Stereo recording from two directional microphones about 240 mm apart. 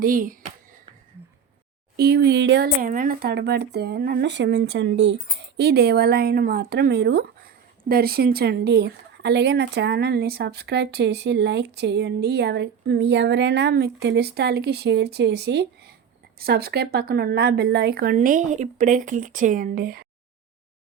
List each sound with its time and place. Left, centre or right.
0.0 s speech: right
2.0 s speech: right
2.8 s speech: right